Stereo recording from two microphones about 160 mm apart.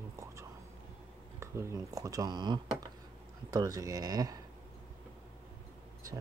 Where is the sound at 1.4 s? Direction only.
20° right (ahead or behind).